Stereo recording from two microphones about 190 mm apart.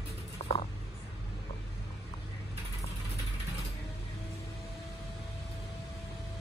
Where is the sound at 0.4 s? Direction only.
35° left (ahead or behind).